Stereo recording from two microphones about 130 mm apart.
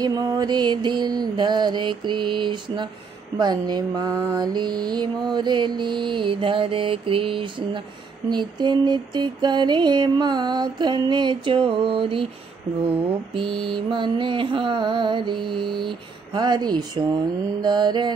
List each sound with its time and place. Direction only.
0.0 s mantra: 30° right (ahead or behind)
4.1 s mantra: 20° right (ahead or behind)
4.4 s mantra: 35° right (ahead or behind)
13.3 s mantra: 40° right (ahead or behind)